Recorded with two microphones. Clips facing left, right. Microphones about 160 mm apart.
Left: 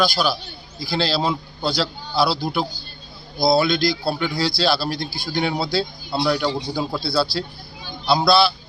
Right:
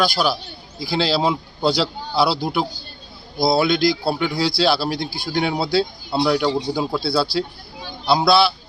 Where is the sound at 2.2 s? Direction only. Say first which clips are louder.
Right 1 dB; 60° right (ahead or behind).